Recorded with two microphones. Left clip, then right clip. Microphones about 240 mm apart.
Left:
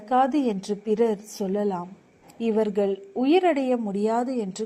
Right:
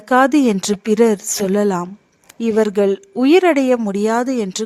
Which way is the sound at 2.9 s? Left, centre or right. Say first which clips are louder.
Right 8 dB; right.